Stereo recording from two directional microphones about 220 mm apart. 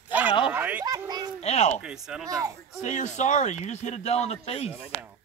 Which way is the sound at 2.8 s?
30° left (ahead or behind).